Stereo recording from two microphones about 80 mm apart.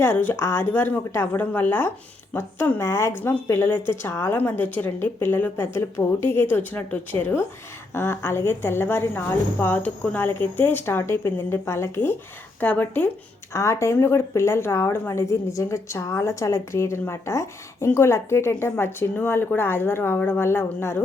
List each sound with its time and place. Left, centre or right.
0.0 s a woman's voice: left
12.5 s a woman's voice: left
13.5 s a woman's voice: left